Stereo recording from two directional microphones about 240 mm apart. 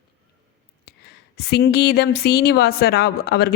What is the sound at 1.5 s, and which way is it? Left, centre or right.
A woman's voice, left.